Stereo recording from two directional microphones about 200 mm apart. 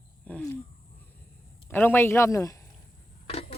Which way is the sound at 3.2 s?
30° left (ahead or behind).